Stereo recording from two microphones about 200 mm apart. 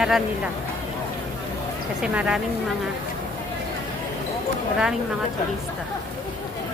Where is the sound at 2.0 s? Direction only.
5° right (ahead or behind).